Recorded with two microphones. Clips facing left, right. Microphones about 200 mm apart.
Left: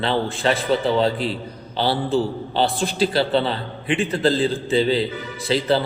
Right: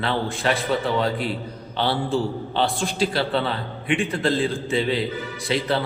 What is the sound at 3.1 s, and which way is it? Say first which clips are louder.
A man's voice: left 4 dB; 30° left (ahead or behind).